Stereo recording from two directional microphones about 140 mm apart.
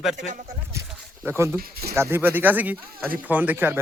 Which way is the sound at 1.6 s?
90° right.